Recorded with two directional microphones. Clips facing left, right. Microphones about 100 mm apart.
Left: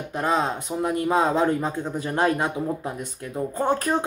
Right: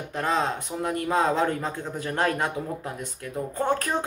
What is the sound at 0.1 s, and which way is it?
Speech, 15° left (ahead or behind).